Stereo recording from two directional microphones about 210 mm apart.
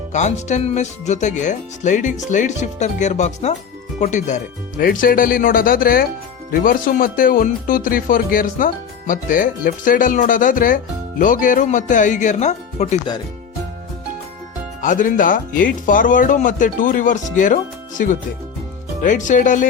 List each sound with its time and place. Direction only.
0.1 s speech: 35° left (ahead or behind)
14.8 s speech: 35° left (ahead or behind)